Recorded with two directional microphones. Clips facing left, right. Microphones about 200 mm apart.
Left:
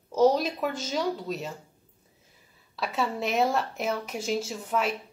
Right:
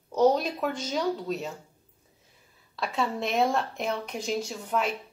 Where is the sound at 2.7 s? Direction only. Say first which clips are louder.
Even; 5° left (ahead or behind).